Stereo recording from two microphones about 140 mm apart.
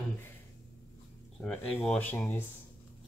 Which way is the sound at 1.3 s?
10° left (ahead or behind).